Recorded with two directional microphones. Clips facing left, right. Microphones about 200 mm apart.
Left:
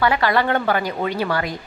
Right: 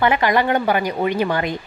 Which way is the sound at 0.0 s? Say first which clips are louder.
Right 1 dB; 20° right (ahead or behind).